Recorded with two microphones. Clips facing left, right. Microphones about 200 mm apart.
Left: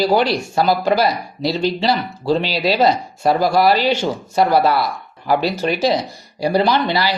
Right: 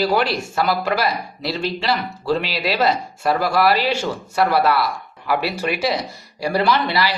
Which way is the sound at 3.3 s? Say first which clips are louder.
Left 2 dB; 40° left (ahead or behind).